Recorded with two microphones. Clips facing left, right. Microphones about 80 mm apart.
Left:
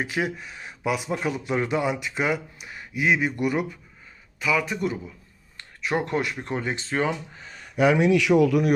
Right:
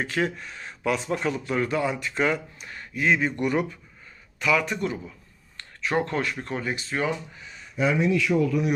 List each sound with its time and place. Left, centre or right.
0.0 s speech: centre; by 7.6 s left
7.6 s speech: left